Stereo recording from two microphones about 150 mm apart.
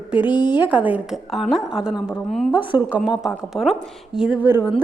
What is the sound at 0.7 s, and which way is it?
A woman's voice, 10° right (ahead or behind).